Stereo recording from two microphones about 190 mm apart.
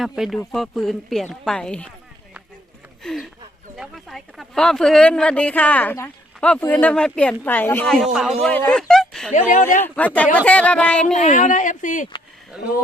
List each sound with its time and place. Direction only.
0.0 s speech: centre (ahead or behind)
3.0 s speech: centre (ahead or behind)
9.3 s speech: 40° left (ahead or behind)
9.8 s speech: 10° left (ahead or behind)
11.0 s speech: 40° left (ahead or behind)